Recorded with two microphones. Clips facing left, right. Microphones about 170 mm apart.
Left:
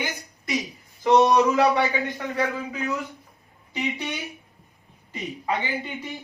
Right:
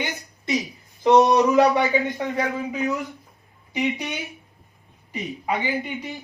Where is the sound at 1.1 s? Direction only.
20° right (ahead or behind).